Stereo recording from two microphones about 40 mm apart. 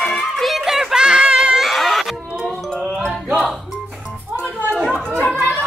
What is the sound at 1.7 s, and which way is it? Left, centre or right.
Music, centre.